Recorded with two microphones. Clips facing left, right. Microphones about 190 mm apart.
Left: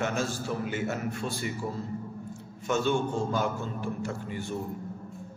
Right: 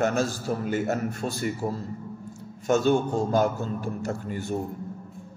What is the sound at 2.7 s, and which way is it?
A man's voice, 40° right (ahead or behind).